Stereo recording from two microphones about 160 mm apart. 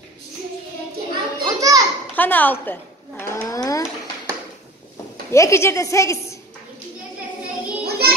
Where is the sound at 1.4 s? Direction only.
20° right (ahead or behind).